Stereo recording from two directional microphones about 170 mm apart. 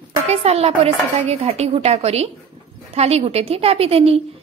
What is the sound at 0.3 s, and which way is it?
A woman's voice, 35° right (ahead or behind).